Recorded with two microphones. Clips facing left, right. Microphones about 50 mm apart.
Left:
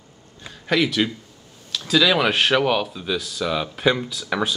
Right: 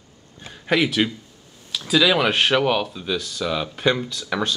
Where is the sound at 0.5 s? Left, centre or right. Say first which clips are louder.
Even; centre.